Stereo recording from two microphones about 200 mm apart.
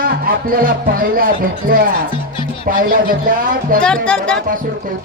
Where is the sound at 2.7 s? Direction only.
45° right (ahead or behind).